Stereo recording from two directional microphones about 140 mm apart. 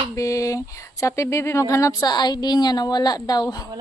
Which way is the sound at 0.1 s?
25° left (ahead or behind).